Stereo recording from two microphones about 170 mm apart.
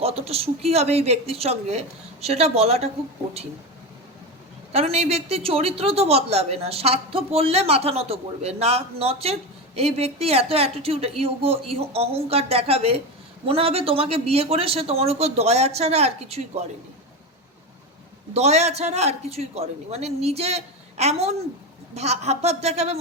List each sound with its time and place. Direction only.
0.0 s a woman's voice: 35° right (ahead or behind)
4.7 s a woman's voice: 40° right (ahead or behind)
18.3 s a woman's voice: 40° right (ahead or behind)